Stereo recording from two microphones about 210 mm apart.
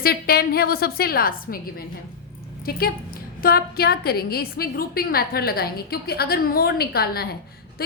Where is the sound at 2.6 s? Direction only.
45° left (ahead or behind).